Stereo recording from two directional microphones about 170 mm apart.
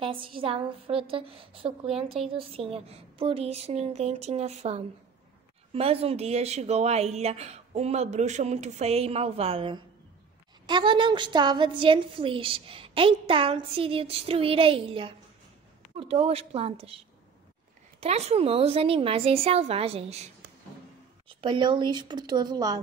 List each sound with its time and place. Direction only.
0.0 s a woman's voice: 30° right (ahead or behind)
2.0 s a woman's voice: centre (ahead or behind)
2.3 s a woman's voice: 35° right (ahead or behind)
18.0 s a woman's voice: 35° right (ahead or behind)
21.3 s speech: 30° right (ahead or behind)